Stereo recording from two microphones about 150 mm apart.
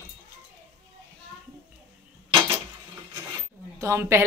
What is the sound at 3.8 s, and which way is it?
Speech, 20° right (ahead or behind).